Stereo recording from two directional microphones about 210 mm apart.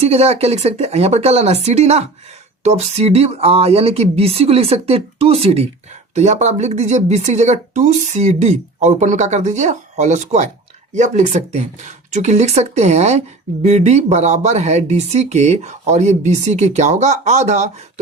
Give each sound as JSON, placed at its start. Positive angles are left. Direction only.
{"t": 0.0, "sound": "speech", "side_deg": -30}